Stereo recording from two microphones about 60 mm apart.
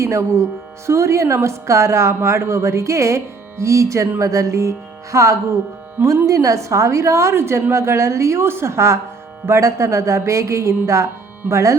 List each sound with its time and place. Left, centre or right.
0.0 s a woman's voice: right